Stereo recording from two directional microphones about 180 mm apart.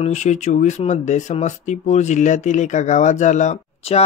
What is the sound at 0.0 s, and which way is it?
Speech, 40° left (ahead or behind).